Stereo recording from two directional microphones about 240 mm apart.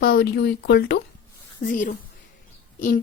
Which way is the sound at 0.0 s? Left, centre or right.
Left.